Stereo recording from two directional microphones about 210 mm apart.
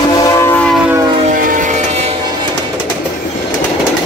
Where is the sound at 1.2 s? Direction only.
40° right (ahead or behind).